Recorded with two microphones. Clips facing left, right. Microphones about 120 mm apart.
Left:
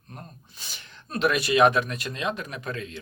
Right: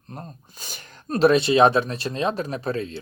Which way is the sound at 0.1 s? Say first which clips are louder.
Right 6 dB; 40° right (ahead or behind).